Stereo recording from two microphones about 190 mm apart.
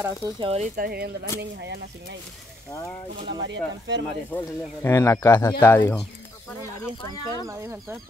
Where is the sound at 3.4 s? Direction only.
70° right (ahead or behind).